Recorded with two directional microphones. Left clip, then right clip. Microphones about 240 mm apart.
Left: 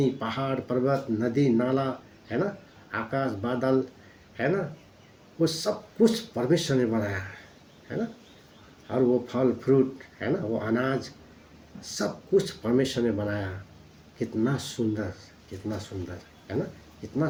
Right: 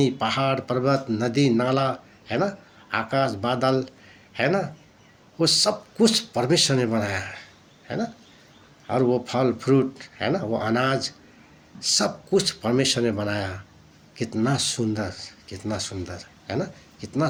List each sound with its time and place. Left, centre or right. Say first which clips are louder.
0.0 s speech: right 6 dB; right
8.9 s speech: right 3 dB; right
16.5 s speech: right 3 dB; right